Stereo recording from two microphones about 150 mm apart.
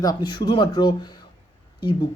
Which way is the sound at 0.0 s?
25° left (ahead or behind).